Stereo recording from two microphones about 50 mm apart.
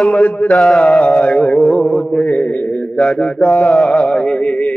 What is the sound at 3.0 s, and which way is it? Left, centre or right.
Mantra, left.